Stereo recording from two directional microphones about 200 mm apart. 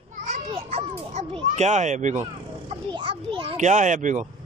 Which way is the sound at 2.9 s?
25° right (ahead or behind).